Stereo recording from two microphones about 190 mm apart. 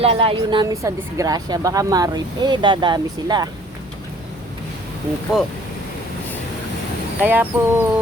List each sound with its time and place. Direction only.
0.0 s speech: 30° right (ahead or behind)
7.2 s speech: 10° right (ahead or behind)